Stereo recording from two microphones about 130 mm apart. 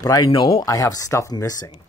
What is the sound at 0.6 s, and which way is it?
Speech, 25° left (ahead or behind).